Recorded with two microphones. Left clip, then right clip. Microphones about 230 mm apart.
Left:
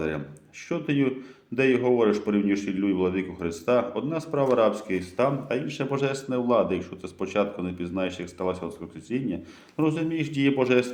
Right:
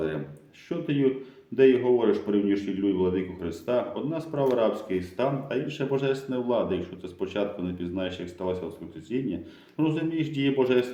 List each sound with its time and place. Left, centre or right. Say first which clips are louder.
0.7 s speech: even; left